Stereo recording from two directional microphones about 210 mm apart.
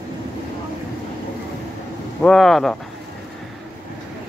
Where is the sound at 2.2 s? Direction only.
Centre (ahead or behind).